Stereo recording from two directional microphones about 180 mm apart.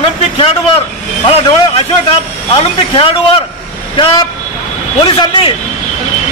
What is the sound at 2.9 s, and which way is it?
A man's voice, 30° left (ahead or behind).